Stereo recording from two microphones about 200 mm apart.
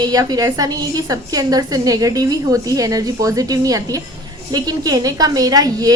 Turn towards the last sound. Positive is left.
turn(degrees=-20)  # may be behind; listen again after turning